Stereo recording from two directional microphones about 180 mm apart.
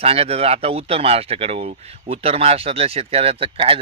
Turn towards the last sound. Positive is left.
turn(degrees=-30)  # may be behind; listen again after turning